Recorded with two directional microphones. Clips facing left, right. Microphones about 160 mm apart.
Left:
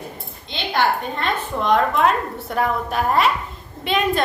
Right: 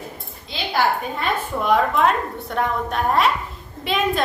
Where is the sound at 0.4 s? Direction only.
5° right (ahead or behind).